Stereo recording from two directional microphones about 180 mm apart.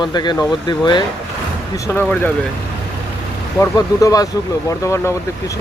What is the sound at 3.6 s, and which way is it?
Speech, 20° left (ahead or behind).